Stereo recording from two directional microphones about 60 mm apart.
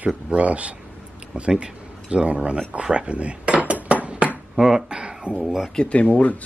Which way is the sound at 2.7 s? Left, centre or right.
Centre.